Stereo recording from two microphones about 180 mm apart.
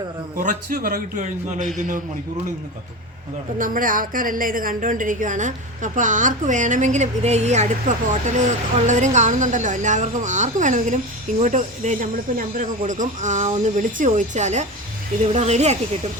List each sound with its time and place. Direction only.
0.3 s a woman's voice: 50° right (ahead or behind)
3.6 s a woman's voice: 50° right (ahead or behind)